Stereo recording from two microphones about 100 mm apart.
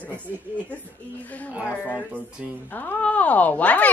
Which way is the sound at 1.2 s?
15° left (ahead or behind).